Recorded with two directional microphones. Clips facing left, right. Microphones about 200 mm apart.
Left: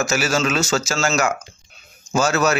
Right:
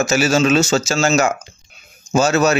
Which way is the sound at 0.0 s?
25° right (ahead or behind).